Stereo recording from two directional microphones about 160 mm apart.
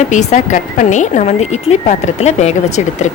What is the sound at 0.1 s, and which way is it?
A woman's voice, 50° left (ahead or behind).